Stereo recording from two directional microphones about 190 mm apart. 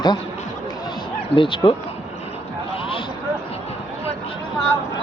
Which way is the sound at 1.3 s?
25° left (ahead or behind).